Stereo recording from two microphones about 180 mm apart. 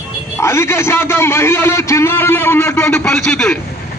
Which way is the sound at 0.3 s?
15° left (ahead or behind).